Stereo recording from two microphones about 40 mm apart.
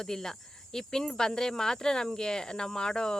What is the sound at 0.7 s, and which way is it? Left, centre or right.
Cricket, centre.